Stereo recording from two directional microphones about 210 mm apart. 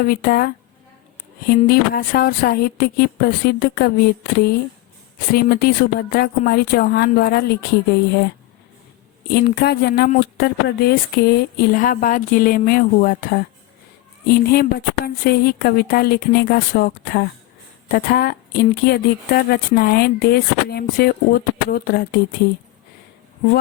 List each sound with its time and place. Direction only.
0.0 s speech: 45° left (ahead or behind)
1.6 s speech: 45° left (ahead or behind)
5.3 s speech: 45° left (ahead or behind)
9.3 s speech: 50° left (ahead or behind)